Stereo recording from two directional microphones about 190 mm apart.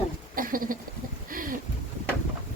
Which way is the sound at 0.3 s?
45° right (ahead or behind).